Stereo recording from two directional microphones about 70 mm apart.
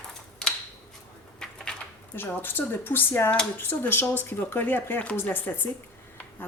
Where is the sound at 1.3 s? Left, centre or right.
Centre.